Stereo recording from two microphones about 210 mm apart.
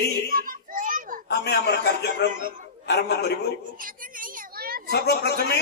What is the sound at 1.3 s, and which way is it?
A man's voice, 50° left (ahead or behind).